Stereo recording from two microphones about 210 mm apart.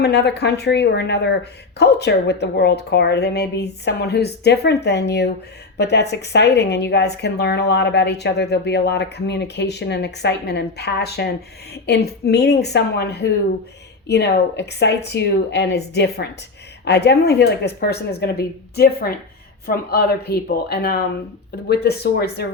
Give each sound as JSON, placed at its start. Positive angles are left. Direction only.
{"t": 0.0, "sound": "speech", "side_deg": 55}